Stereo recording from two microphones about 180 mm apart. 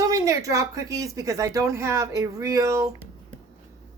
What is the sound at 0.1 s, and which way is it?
A woman's voice, 20° right (ahead or behind).